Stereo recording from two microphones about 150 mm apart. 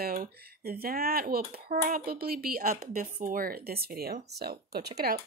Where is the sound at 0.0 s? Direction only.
80° right.